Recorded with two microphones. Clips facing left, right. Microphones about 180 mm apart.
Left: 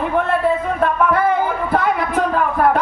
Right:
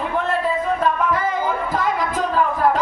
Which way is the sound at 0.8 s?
60° left (ahead or behind).